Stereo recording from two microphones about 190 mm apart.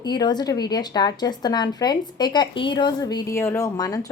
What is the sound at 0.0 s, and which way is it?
Speech, 20° left (ahead or behind).